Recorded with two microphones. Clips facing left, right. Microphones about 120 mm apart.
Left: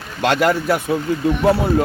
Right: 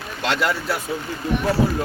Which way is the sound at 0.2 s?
45° left (ahead or behind).